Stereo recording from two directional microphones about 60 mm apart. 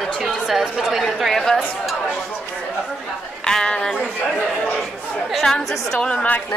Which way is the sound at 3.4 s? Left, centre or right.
Centre.